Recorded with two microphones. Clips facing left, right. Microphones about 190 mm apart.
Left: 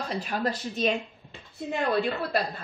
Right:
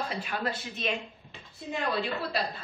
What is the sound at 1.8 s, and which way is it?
Speech, 50° left (ahead or behind).